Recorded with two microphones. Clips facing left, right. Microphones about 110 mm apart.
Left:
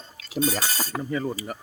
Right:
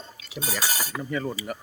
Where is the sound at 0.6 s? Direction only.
10° right (ahead or behind).